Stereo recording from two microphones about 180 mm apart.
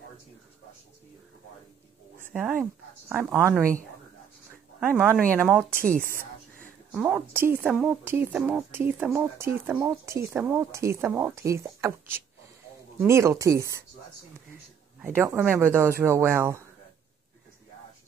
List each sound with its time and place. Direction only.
2.3 s a woman's voice: 10° right (ahead or behind)
4.7 s a woman's voice: 10° right (ahead or behind)
5.8 s speech: 50° right (ahead or behind)
6.9 s a woman's voice: 5° right (ahead or behind)
15.0 s a woman's voice: 10° right (ahead or behind)